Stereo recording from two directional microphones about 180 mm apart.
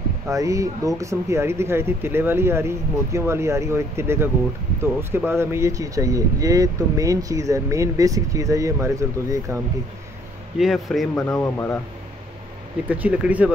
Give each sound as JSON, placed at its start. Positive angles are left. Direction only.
{"t": 0.3, "sound": "speech", "side_deg": -20}
{"t": 10.6, "sound": "speech", "side_deg": 0}
{"t": 12.8, "sound": "speech", "side_deg": -10}